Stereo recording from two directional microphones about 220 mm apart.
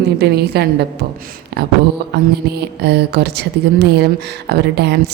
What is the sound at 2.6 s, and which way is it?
A woman's voice, 50° right (ahead or behind).